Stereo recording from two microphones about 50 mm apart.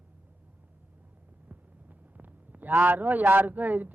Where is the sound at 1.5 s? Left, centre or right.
Right.